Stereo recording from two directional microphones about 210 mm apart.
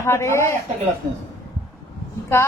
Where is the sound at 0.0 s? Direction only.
10° left (ahead or behind).